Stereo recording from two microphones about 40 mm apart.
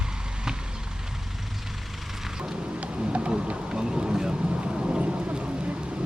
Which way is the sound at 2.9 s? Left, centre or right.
Right.